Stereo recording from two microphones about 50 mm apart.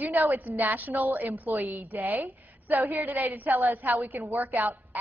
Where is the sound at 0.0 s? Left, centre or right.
Right.